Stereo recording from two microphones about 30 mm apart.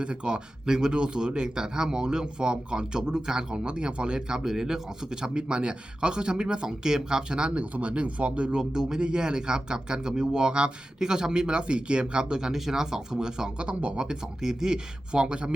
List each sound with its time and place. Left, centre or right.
0.0 s speech: right
3.5 s speech: right
4.4 s speech: centre
5.2 s speech: right
7.5 s speech: right
8.5 s speech: right
12.5 s speech: centre
12.8 s speech: right
13.6 s speech: right
14.0 s speech: right
15.1 s speech: right